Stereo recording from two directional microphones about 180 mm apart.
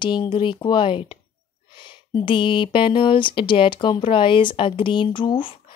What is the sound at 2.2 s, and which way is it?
Speech, 25° left (ahead or behind).